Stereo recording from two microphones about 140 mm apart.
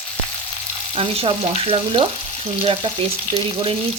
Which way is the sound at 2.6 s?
45° right (ahead or behind).